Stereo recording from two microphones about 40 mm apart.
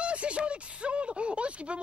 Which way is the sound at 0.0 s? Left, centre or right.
Right.